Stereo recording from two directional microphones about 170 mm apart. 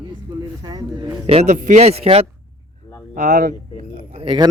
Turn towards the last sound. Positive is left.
turn(degrees=-30)  # may be behind; listen again after turning